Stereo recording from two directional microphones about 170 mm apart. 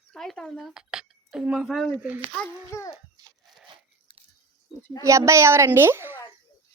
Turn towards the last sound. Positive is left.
turn(degrees=-15)  # may be behind; listen again after turning